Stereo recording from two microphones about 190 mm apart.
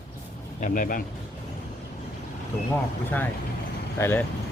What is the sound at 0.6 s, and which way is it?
Speech, 40° left (ahead or behind).